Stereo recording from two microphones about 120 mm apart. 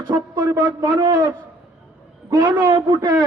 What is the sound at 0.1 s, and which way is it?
Speech, 30° right (ahead or behind).